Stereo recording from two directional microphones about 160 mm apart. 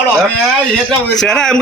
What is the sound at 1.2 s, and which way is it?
Speech, 5° left (ahead or behind).